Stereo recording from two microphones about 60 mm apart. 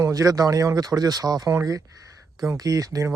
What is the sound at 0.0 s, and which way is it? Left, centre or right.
Speech, right.